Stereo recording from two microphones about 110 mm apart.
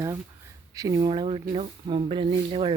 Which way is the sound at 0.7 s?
30° right (ahead or behind).